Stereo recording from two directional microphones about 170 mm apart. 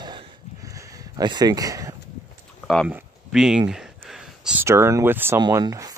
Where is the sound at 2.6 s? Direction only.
Centre (ahead or behind).